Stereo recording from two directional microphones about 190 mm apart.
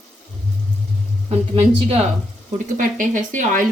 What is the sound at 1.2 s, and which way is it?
Speech, 30° right (ahead or behind).